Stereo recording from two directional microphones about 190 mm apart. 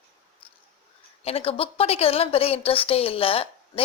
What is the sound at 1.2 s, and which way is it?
A woman's voice, 30° left (ahead or behind).